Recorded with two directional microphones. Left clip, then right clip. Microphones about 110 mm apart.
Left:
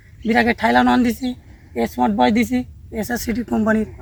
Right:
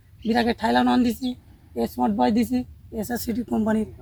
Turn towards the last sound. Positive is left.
turn(degrees=-10)  # may be behind; listen again after turning